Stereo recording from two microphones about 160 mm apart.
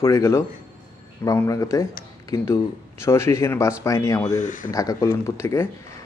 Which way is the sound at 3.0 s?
15° left (ahead or behind).